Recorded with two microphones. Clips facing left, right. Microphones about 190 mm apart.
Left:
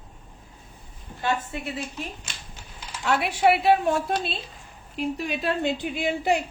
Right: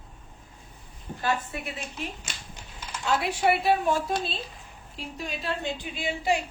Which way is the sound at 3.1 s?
65° left (ahead or behind).